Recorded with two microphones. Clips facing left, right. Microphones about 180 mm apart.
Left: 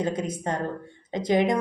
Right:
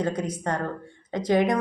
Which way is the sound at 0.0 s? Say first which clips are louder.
Even; 25° left (ahead or behind).